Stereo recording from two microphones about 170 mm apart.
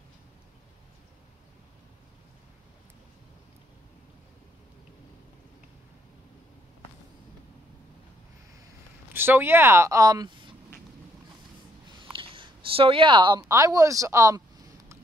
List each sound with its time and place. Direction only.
9.1 s a woman's voice: 15° right (ahead or behind)
12.1 s a woman's voice: 30° right (ahead or behind)